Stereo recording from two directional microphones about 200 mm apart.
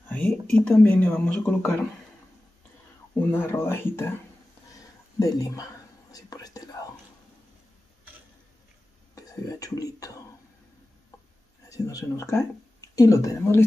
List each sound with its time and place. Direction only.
0.1 s a sound: 5° left (ahead or behind)
0.7 s speech: 5° left (ahead or behind)
3.3 s speech: 10° left (ahead or behind)
5.2 s speech: 15° left (ahead or behind)
6.1 s whispering: 20° left (ahead or behind)
9.1 s speech: 15° left (ahead or behind)
11.7 s speech: 15° left (ahead or behind)